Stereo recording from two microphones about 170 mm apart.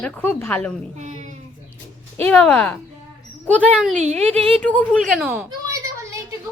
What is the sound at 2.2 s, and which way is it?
Speech, 5° left (ahead or behind).